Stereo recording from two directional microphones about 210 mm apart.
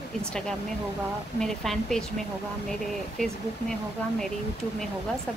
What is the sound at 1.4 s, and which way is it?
Speech, centre (ahead or behind).